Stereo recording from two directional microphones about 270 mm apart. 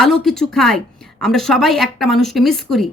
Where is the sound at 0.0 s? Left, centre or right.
Centre.